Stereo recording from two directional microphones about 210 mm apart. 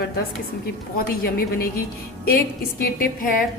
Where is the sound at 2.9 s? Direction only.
45° left (ahead or behind).